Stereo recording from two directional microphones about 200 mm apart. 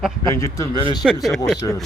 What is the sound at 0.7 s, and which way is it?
Speech, 25° right (ahead or behind).